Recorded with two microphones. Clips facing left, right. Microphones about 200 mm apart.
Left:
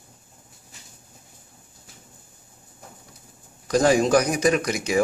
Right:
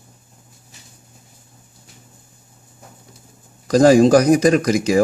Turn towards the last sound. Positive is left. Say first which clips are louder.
# right 8 dB
turn(degrees=-35)  # may be behind; listen again after turning